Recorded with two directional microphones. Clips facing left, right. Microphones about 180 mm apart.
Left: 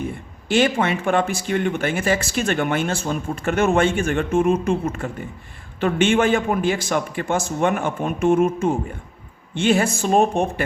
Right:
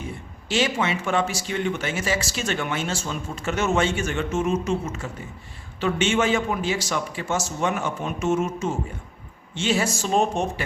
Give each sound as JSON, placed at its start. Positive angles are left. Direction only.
{"t": 0.4, "sound": "speech", "side_deg": 55}